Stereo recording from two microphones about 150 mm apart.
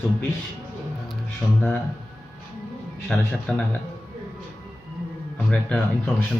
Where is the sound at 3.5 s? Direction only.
5° left (ahead or behind).